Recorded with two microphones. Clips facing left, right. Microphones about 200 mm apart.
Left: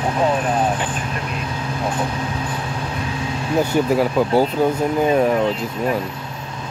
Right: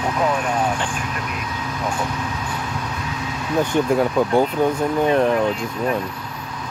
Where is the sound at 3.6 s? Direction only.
5° left (ahead or behind).